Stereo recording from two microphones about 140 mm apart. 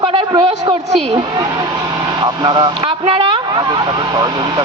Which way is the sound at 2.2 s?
30° right (ahead or behind).